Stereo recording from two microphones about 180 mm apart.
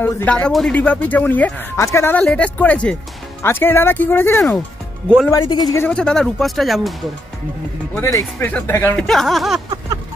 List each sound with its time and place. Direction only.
0.0 s a man's voice: 10° left (ahead or behind)
5.8 s speech: 5° left (ahead or behind)
7.9 s speech: 15° left (ahead or behind)
9.0 s speech: centre (ahead or behind)